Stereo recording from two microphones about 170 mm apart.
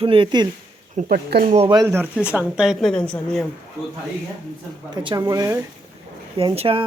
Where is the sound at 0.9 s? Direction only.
60° right (ahead or behind).